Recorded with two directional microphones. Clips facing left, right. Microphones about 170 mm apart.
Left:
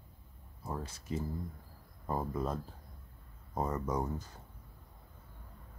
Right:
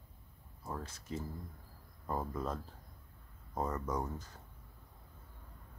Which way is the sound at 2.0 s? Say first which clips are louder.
Left 3 dB; 10° left (ahead or behind).